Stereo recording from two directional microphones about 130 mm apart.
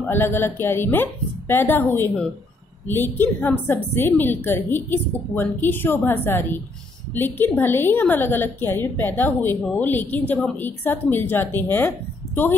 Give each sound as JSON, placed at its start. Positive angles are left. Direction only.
{"t": 0.1, "sound": "a woman's voice", "side_deg": 15}